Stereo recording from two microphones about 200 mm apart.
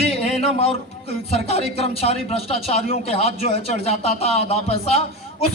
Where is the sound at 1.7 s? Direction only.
30° left (ahead or behind).